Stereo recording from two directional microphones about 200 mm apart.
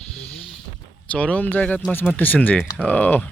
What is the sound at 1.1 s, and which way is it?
Speech, 5° left (ahead or behind).